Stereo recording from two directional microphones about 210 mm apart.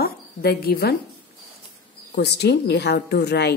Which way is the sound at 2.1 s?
55° left (ahead or behind).